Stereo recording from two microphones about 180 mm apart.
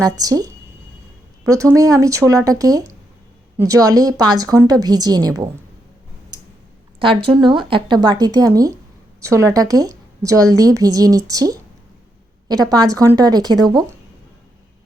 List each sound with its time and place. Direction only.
0.0 s a woman's voice: 20° right (ahead or behind)
7.0 s a woman's voice: 30° right (ahead or behind)
12.6 s a woman's voice: 20° right (ahead or behind)